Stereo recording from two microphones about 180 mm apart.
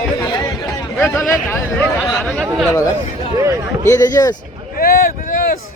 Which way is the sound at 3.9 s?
20° left (ahead or behind).